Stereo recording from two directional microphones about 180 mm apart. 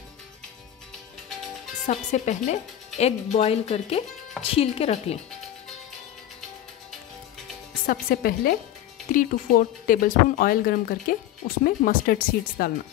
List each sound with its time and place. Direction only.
1.9 s speech: 40° left (ahead or behind)
7.8 s speech: 55° left (ahead or behind)